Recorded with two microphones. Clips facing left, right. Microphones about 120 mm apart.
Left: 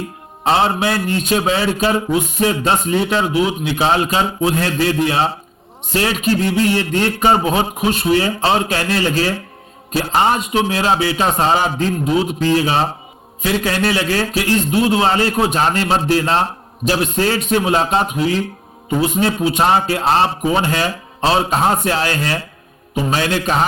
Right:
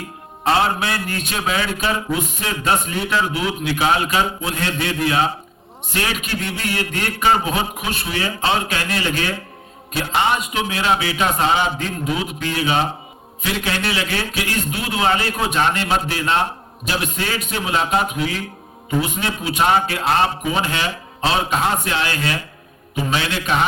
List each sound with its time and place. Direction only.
0.4 s a man's voice: 25° left (ahead or behind)